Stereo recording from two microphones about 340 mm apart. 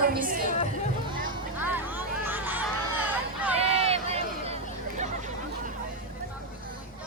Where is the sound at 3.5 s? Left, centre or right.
Centre.